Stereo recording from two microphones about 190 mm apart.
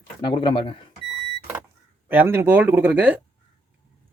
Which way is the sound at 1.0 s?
Centre (ahead or behind).